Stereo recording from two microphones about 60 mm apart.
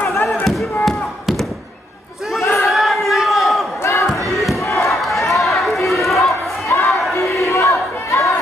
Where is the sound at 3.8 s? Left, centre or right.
Left.